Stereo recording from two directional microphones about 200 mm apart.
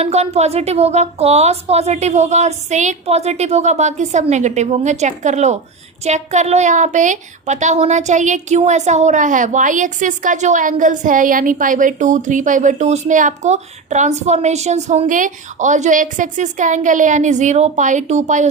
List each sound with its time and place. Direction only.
0.0 s a woman's voice: 30° right (ahead or behind)